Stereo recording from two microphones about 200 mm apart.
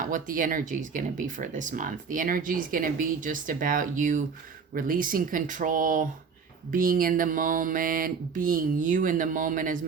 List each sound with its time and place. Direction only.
0.0 s speech: 45° right (ahead or behind)